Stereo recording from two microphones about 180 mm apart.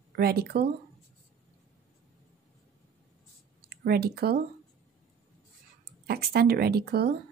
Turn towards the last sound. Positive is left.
turn(degrees=-60)  # may be behind; listen again after turning